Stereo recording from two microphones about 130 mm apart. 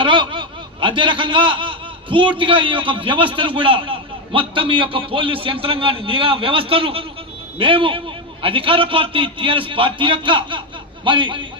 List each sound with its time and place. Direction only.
0.0 s a man's voice: 40° right (ahead or behind)